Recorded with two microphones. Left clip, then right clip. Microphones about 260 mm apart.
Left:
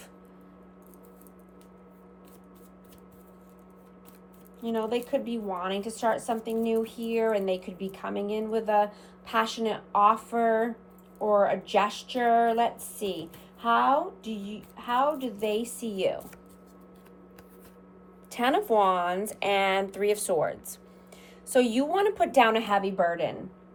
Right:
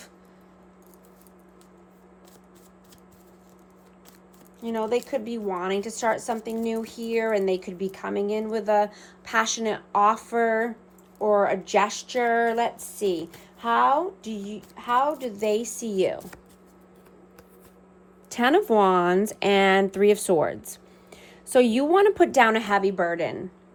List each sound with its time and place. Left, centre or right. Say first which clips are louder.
4.6 s a woman's voice: right 3 dB; right
18.3 s a woman's voice: right 4 dB; right